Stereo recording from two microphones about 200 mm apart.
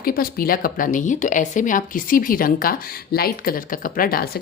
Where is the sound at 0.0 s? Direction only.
45° left (ahead or behind).